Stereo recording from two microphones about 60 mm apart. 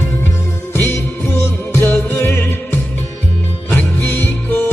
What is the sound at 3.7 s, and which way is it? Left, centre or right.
Music, left.